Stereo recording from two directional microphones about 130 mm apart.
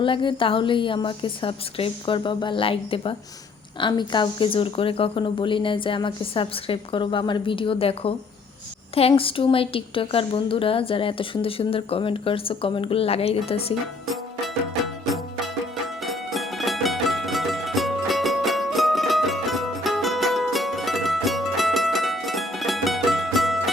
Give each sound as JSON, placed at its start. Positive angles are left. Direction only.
{"t": 0.0, "sound": "a woman's voice", "side_deg": 40}
{"t": 16.0, "sound": "music", "side_deg": 0}